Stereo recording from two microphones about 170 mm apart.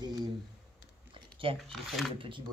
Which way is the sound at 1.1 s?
30° right (ahead or behind).